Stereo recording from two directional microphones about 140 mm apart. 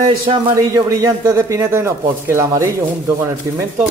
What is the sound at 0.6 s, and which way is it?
Speech, 20° right (ahead or behind).